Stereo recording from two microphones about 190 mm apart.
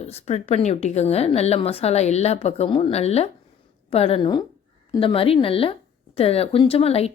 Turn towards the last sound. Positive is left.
turn(degrees=30)  # may be behind; listen again after turning